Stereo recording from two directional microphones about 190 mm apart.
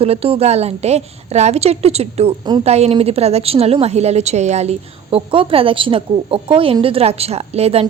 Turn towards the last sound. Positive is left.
turn(degrees=-35)  # may be behind; listen again after turning